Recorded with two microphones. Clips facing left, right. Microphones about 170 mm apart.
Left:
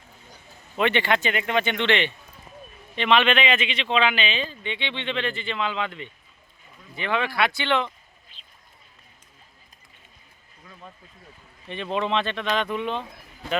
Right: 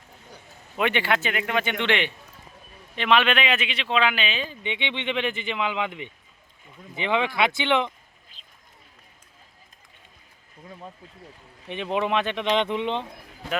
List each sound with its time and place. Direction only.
0.8 s speech: 10° right (ahead or behind)
11.7 s speech: 15° right (ahead or behind)